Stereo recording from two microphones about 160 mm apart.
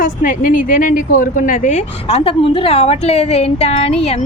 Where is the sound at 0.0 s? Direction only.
55° left (ahead or behind).